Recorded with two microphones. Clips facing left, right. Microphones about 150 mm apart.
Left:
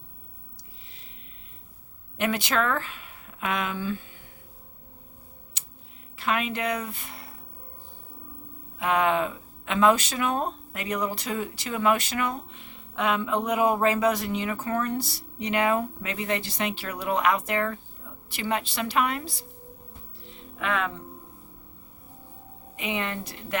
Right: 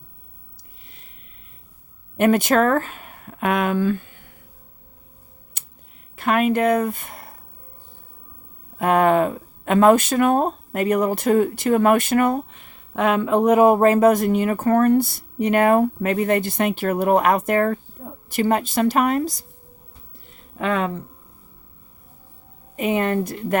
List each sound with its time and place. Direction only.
2.1 s speech: 45° right (ahead or behind)
5.6 s a sound: 55° right (ahead or behind)
6.1 s speech: 50° right (ahead or behind)
8.8 s speech: 50° right (ahead or behind)
20.3 s music: 40° right (ahead or behind)
22.7 s speech: 45° right (ahead or behind)